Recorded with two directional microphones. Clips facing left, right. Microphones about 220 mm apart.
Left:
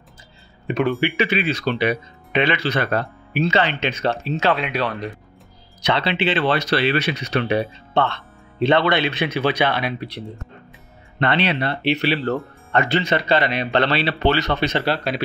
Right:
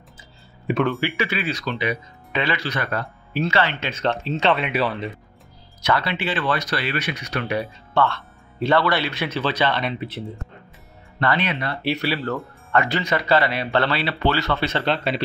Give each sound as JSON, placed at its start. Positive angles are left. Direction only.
{"t": 0.8, "sound": "speech", "side_deg": 15}
{"t": 1.6, "sound": "speech", "side_deg": 65}
{"t": 2.3, "sound": "speech", "side_deg": 20}
{"t": 4.5, "sound": "speech", "side_deg": -5}
{"t": 5.9, "sound": "speech", "side_deg": 25}
{"t": 9.8, "sound": "speech", "side_deg": 0}
{"t": 11.1, "sound": "speech", "side_deg": 25}
{"t": 14.9, "sound": "speech", "side_deg": 0}